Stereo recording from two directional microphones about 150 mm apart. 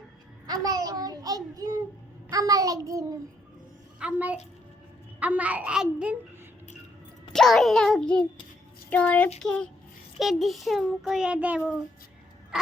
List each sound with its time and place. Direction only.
0.4 s a child's voice: 25° right (ahead or behind)
4.0 s a child's voice: 10° right (ahead or behind)
7.3 s a child's voice: centre (ahead or behind)